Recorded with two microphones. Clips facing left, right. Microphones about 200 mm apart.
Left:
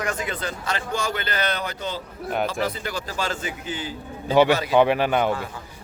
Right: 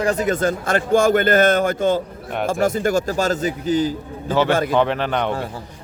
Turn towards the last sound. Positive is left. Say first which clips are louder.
# left 1 dB
turn(degrees=5)  # may be behind; listen again after turning